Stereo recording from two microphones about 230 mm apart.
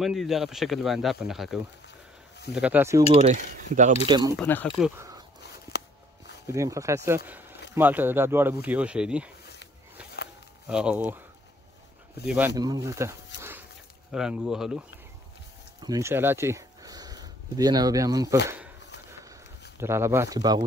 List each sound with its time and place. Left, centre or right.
0.0 s speech: centre
3.2 s speech: right
4.1 s speech: centre
4.4 s speech: centre
5.7 s a sound: left
6.4 s speech: centre
7.2 s a sound: centre
7.7 s speech: centre
10.7 s speech: centre
12.3 s speech: centre
13.4 s dog: centre
14.1 s speech: centre
15.8 s speech: centre
19.8 s speech: centre